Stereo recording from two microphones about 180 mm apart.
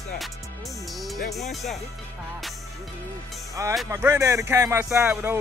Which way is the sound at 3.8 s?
15° right (ahead or behind).